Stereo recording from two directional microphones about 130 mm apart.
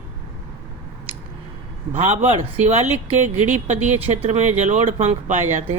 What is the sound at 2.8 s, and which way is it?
Speech, 60° right (ahead or behind).